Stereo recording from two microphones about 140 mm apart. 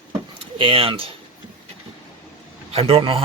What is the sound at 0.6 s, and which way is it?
Speech, 40° right (ahead or behind).